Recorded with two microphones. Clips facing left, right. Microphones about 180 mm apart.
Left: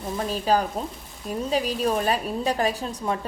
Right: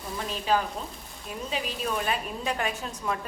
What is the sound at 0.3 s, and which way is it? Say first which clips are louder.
A woman's voice: left 3 dB; 40° left (ahead or behind).